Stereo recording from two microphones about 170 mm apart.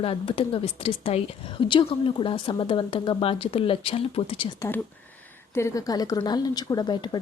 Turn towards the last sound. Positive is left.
turn(degrees=25)  # may be behind; listen again after turning